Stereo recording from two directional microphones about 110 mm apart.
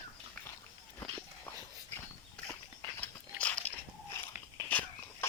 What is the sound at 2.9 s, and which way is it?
Dog, 15° left (ahead or behind).